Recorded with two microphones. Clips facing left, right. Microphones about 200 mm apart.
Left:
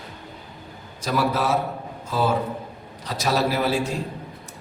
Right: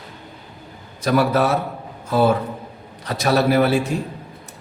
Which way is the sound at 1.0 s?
60° right (ahead or behind).